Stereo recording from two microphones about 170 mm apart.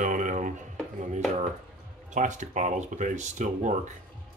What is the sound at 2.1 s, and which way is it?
Speech, 45° right (ahead or behind).